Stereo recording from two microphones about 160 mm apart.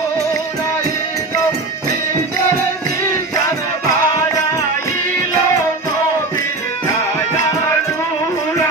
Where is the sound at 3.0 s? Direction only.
20° left (ahead or behind).